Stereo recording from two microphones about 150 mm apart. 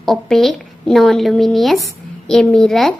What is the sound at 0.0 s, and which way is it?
A woman's voice, centre (ahead or behind).